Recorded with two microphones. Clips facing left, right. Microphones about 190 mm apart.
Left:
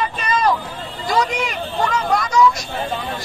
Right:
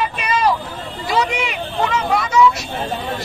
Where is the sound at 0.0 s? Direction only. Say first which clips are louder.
Right 1 dB; 10° right (ahead or behind).